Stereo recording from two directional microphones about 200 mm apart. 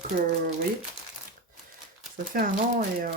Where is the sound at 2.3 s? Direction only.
45° right (ahead or behind).